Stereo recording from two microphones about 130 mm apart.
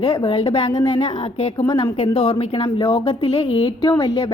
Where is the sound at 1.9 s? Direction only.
45° left (ahead or behind).